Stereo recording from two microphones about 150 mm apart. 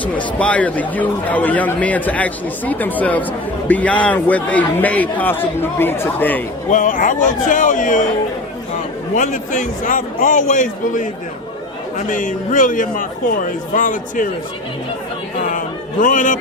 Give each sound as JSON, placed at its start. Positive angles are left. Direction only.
{"t": 0.0, "sound": "speech", "side_deg": 10}
{"t": 6.7, "sound": "a man's voice", "side_deg": 60}
{"t": 9.1, "sound": "a man's voice", "side_deg": 60}
{"t": 15.4, "sound": "music", "side_deg": 60}